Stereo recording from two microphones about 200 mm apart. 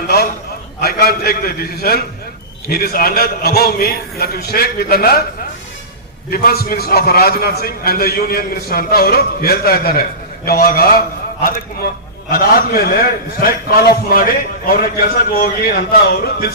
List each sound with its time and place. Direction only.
0.8 s a man's voice: 50° left (ahead or behind)
6.3 s a man's voice: 50° left (ahead or behind)
12.3 s a man's voice: 50° left (ahead or behind)